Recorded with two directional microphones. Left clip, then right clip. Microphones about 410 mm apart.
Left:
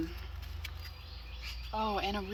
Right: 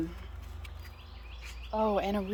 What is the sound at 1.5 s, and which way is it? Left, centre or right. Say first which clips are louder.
Speech: right 5 dB; centre.